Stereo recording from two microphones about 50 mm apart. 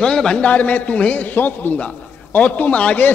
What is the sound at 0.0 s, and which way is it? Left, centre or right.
A man's voice, centre.